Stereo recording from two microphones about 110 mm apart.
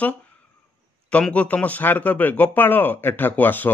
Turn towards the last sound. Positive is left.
turn(degrees=15)  # may be behind; listen again after turning